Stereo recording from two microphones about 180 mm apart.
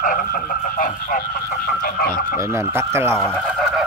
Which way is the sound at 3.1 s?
Centre (ahead or behind).